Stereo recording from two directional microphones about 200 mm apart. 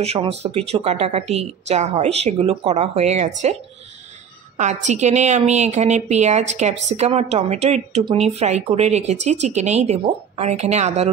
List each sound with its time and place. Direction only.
0.0 s speech: 30° right (ahead or behind)
4.6 s speech: 35° right (ahead or behind)